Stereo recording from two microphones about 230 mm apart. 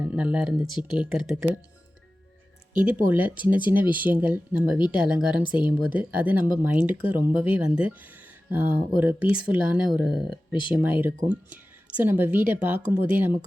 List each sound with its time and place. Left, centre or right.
0.0 s speech: centre
2.7 s speech: centre
5.4 s speech: centre
5.9 s speech: centre
10.5 s speech: centre
10.8 s speech: centre